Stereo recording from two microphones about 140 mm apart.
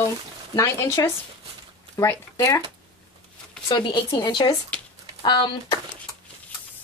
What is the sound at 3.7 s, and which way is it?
Speech, 35° left (ahead or behind).